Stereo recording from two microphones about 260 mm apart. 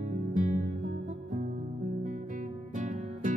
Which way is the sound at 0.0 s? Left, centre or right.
Right.